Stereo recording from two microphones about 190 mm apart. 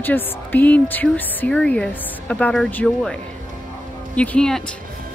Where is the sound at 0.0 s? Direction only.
10° left (ahead or behind).